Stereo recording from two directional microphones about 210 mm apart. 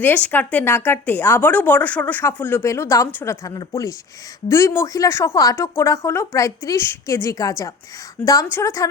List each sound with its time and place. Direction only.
0.0 s speech: 10° left (ahead or behind)